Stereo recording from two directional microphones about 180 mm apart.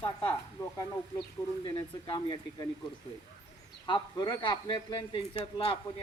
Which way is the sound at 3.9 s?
25° left (ahead or behind).